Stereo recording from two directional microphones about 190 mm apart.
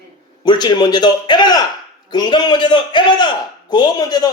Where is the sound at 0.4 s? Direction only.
20° left (ahead or behind).